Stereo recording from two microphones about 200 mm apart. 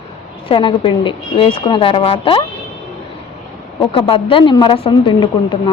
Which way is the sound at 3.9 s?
25° left (ahead or behind).